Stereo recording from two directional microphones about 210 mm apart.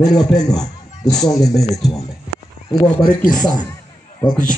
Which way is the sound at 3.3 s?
20° left (ahead or behind).